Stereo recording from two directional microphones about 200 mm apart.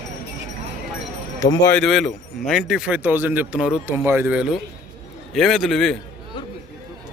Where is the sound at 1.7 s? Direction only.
Centre (ahead or behind).